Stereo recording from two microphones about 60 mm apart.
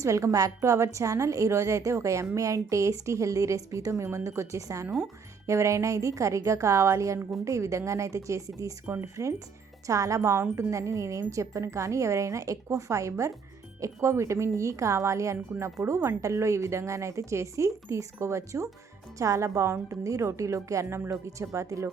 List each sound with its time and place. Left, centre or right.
0.0 s a woman's voice: right
8.9 s a woman's voice: right
9.8 s a woman's voice: right
15.4 s a woman's voice: right